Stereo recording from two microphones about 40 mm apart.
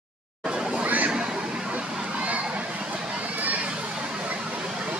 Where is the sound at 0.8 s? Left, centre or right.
Right.